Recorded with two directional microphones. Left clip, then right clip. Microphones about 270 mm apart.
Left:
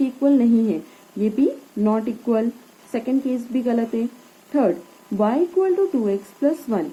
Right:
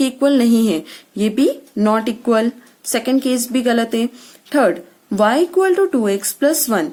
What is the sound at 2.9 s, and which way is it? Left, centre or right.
Speech, right.